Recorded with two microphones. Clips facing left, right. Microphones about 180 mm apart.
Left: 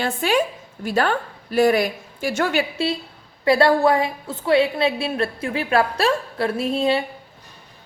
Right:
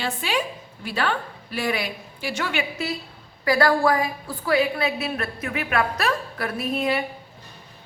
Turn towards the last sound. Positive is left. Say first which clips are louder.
# left 4 dB
turn(degrees=30)  # may be behind; listen again after turning